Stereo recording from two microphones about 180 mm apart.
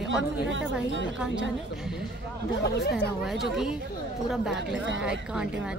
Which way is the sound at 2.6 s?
60° left (ahead or behind).